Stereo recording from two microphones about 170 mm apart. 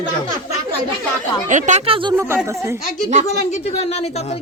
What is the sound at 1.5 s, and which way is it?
Speech, 45° right (ahead or behind).